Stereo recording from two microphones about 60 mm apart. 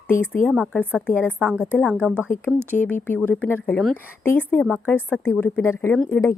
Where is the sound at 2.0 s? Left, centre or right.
Right.